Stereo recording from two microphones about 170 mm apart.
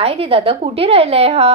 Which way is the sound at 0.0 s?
35° right (ahead or behind).